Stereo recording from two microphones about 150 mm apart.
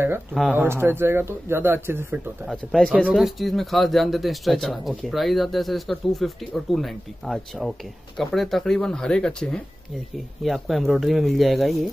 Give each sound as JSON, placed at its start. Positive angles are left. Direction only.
{"t": 0.3, "sound": "speech", "side_deg": -5}
{"t": 0.6, "sound": "speech", "side_deg": -15}
{"t": 2.4, "sound": "speech", "side_deg": 0}